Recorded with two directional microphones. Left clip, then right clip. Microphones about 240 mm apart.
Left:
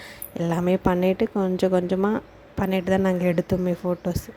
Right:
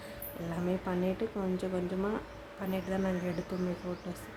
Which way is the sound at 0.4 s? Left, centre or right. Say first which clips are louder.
Left 13 dB; left.